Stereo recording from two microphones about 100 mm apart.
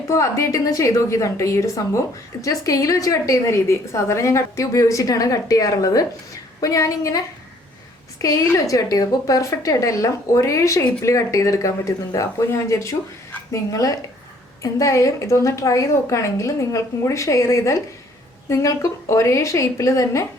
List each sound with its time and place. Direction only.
0.1 s a woman's voice: 30° left (ahead or behind)